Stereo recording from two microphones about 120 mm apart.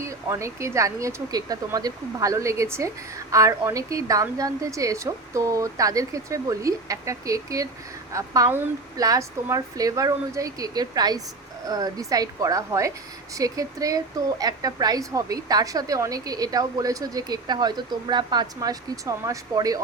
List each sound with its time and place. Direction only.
0.0 s a woman's voice: 25° right (ahead or behind)